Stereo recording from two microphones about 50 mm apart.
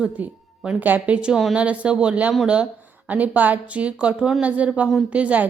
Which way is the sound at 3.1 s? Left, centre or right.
Right.